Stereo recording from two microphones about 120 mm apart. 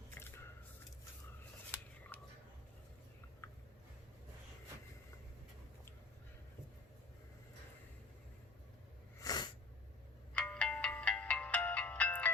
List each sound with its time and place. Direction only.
0.1 s a sound: 20° left (ahead or behind)
9.2 s sneeze: 35° left (ahead or behind)
10.3 s music: 10° left (ahead or behind)